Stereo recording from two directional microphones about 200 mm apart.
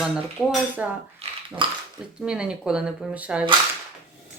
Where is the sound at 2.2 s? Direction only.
5° right (ahead or behind).